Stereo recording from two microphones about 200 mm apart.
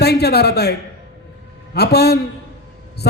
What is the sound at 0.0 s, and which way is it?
A man's voice, 55° left (ahead or behind).